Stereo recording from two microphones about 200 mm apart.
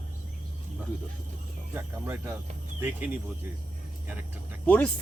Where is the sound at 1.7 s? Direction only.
10° right (ahead or behind).